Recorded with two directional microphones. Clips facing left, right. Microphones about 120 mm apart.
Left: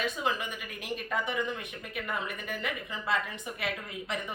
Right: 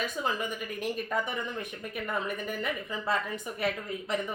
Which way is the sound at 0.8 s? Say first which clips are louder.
Right 2 dB; 40° right (ahead or behind).